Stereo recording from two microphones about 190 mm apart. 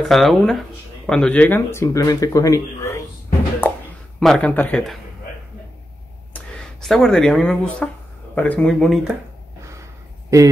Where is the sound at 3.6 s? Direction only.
10° left (ahead or behind).